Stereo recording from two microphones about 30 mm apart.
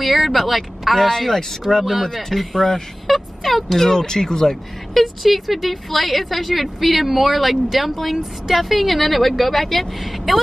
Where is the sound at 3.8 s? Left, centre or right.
Centre.